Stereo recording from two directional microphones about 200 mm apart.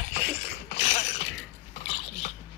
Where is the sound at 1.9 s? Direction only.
30° left (ahead or behind).